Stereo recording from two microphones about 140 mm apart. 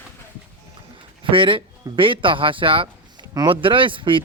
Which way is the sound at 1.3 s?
40° right (ahead or behind).